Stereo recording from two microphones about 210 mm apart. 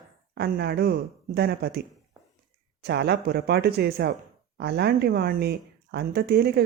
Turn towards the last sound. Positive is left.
turn(degrees=-50)  # may be behind; listen again after turning